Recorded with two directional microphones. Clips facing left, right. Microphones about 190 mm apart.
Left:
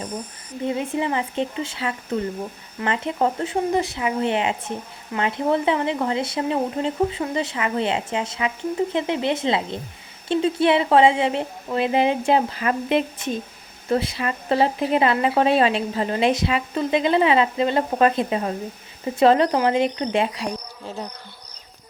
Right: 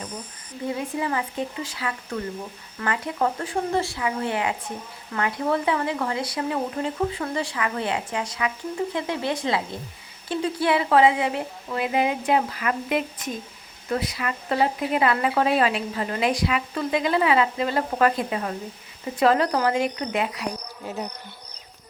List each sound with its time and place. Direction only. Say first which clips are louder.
0.6 s speech: left 3 dB; 25° left (ahead or behind)